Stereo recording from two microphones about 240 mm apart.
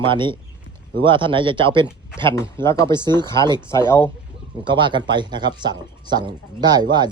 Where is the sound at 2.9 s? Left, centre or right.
Centre.